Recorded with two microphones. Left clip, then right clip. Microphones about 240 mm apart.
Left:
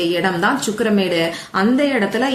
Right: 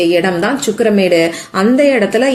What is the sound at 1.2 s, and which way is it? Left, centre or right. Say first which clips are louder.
Speech: right 5 dB; centre.